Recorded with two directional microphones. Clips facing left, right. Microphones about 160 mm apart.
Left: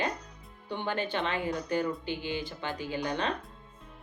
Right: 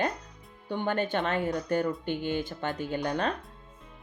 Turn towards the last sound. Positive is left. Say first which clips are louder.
# right 3 dB
turn(degrees=-45)  # may be behind; listen again after turning